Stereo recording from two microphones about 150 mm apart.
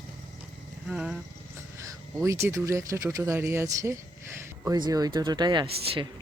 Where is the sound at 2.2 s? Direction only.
20° right (ahead or behind).